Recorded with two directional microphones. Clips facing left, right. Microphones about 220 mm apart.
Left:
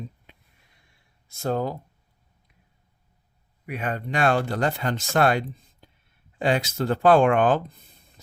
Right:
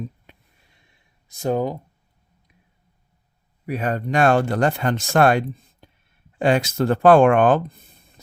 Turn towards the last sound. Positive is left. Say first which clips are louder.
# right 4 dB
turn(degrees=-50)  # may be behind; listen again after turning